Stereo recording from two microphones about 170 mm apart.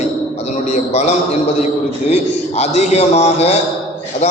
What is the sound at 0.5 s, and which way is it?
A man's voice, 40° left (ahead or behind).